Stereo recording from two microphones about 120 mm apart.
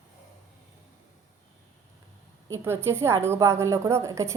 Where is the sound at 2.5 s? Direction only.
20° right (ahead or behind).